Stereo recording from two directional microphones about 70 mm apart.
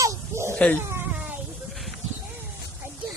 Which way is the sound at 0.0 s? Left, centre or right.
Right.